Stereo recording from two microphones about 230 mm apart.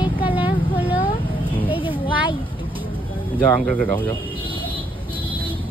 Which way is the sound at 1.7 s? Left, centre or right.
Left.